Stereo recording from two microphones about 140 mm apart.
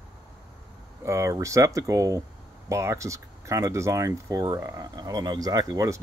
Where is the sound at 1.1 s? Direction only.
20° right (ahead or behind).